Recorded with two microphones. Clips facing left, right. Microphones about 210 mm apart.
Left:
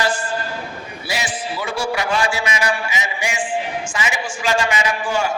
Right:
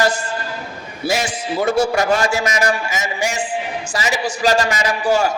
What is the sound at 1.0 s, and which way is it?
A man's voice, 45° right (ahead or behind).